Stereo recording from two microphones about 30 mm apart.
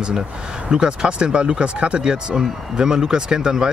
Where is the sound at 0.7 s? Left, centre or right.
Right.